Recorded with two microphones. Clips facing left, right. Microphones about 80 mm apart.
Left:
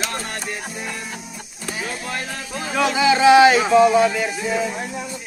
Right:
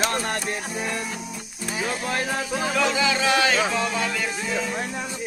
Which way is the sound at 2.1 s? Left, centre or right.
Centre.